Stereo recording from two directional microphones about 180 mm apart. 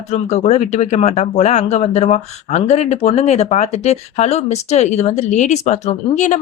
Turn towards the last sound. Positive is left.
turn(degrees=40)  # may be behind; listen again after turning